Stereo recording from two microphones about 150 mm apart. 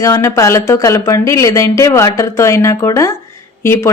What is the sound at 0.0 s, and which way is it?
Speech, 20° left (ahead or behind).